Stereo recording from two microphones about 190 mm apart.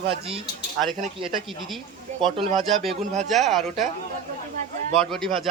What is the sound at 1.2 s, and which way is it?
Speech, centre (ahead or behind).